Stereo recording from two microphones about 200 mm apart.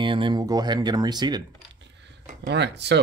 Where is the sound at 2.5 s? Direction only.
55° right (ahead or behind).